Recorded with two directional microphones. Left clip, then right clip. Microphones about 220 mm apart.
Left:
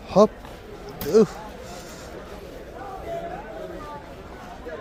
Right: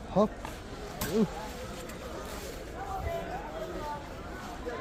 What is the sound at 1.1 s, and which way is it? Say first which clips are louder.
Speech: left 14 dB; 65° left (ahead or behind).